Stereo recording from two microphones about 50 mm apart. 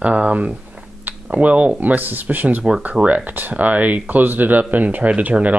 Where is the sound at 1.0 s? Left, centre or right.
Right.